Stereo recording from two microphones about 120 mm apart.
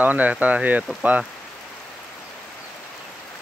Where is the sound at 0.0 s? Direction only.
15° right (ahead or behind).